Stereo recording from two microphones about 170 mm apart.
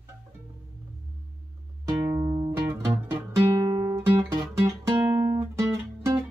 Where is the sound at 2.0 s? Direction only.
15° right (ahead or behind).